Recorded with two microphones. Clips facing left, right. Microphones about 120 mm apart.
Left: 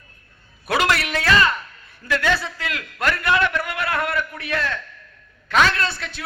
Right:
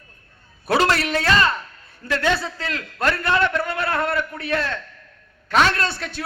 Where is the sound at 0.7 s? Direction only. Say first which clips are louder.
Right 2 dB; 35° right (ahead or behind).